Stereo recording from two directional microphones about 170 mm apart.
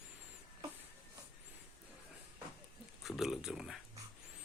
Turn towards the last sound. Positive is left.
turn(degrees=0)  # may be behind; listen again after turning